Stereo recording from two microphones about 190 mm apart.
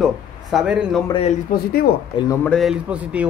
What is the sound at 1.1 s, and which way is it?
Speech, 30° left (ahead or behind).